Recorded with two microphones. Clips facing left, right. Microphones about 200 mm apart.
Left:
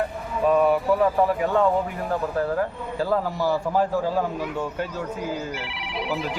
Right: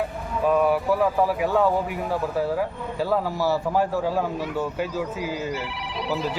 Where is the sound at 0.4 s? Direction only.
Centre (ahead or behind).